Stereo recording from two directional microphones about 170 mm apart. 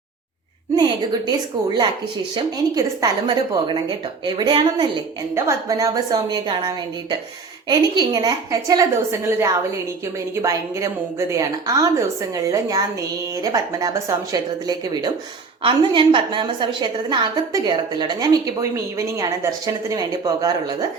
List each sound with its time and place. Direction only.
0.8 s a woman's voice: 25° right (ahead or behind)